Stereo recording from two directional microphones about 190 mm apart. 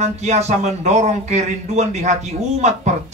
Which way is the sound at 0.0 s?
35° right (ahead or behind).